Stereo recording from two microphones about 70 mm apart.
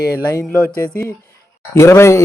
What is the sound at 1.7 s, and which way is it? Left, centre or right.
Speech, left.